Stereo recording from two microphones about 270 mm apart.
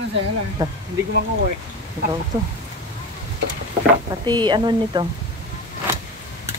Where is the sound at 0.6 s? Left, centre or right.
Centre.